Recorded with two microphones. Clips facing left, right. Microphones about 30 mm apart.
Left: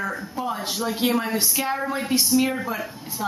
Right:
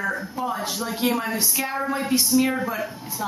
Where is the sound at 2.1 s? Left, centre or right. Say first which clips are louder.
Even; centre.